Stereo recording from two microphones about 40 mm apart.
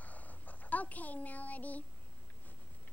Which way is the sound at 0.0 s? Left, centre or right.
Left.